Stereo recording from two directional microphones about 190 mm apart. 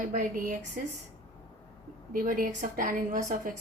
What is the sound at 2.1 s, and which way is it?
A woman's voice, 45° right (ahead or behind).